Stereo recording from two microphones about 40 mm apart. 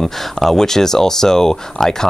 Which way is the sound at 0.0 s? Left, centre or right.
Centre.